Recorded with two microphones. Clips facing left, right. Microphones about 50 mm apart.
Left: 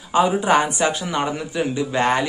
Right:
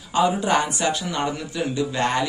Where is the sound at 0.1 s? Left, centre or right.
Centre.